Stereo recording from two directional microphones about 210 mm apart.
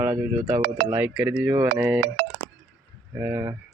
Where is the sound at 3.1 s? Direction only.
10° right (ahead or behind).